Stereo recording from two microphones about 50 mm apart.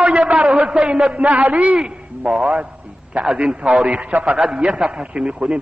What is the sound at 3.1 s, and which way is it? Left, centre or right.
A man's voice, right.